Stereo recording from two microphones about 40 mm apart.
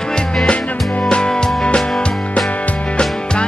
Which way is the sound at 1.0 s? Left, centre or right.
Left.